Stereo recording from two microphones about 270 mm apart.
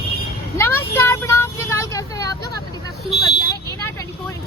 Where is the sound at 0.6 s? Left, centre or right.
Centre.